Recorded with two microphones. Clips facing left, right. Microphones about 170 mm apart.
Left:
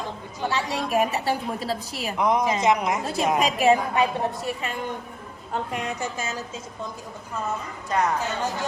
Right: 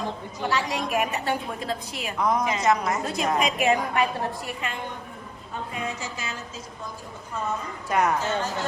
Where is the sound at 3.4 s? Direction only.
35° left (ahead or behind).